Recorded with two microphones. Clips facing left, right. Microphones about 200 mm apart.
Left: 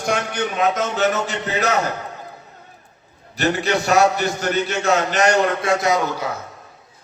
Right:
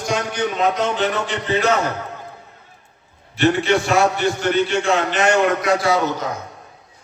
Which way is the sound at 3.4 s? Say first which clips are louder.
Right 3 dB; 40° left (ahead or behind).